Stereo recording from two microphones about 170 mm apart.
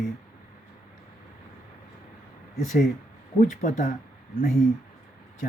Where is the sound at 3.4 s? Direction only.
50° left (ahead or behind).